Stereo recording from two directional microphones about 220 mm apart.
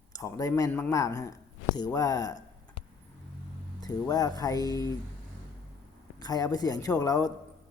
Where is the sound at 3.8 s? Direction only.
15° left (ahead or behind).